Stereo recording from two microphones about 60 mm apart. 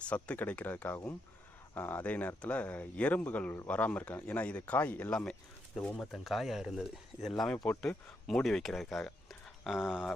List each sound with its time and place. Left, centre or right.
0.0 s speech: left
5.1 s speech: centre
7.7 s speech: left
8.3 s speech: centre
8.6 s a sound: centre
9.7 s speech: centre